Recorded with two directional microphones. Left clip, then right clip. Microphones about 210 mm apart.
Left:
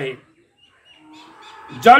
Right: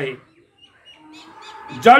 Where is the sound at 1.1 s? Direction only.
50° right (ahead or behind).